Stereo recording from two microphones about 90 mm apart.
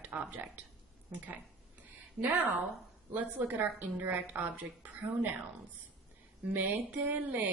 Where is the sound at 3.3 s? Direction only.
20° right (ahead or behind).